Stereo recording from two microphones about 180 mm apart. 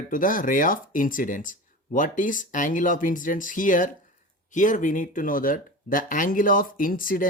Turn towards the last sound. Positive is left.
turn(degrees=50)  # may be behind; listen again after turning